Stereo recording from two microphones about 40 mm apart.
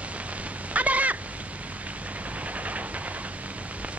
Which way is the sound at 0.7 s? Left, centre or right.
Right.